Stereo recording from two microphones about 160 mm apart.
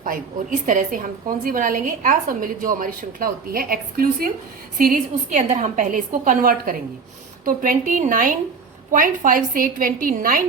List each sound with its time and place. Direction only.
0.6 s a woman's voice: 55° right (ahead or behind)